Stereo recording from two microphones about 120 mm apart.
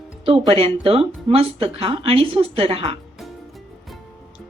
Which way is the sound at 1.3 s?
50° right (ahead or behind).